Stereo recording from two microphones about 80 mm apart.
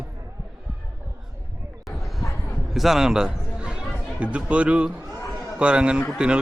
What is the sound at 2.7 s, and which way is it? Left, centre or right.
A man's voice, centre.